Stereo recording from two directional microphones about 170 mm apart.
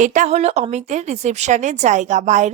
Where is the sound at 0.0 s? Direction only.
45° right (ahead or behind).